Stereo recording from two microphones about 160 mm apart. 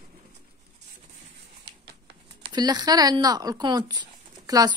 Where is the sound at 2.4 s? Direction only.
25° right (ahead or behind).